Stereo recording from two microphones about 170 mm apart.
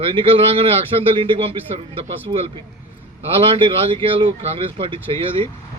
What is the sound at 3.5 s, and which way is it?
Speech, 30° right (ahead or behind).